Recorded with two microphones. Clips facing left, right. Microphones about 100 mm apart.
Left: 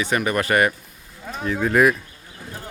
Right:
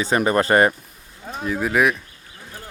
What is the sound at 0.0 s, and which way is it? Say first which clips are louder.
Speech: right 3 dB; 30° right (ahead or behind).